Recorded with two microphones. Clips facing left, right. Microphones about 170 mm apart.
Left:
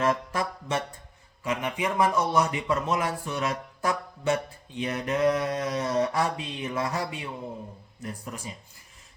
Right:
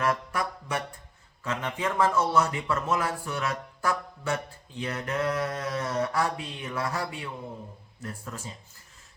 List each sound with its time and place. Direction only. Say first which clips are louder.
0.0 s music: left 2 dB; 25° left (ahead or behind)
1.5 s a man's voice: left 2 dB; 15° left (ahead or behind)